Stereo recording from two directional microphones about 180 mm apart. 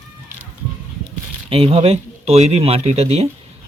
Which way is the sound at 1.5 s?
30° right (ahead or behind).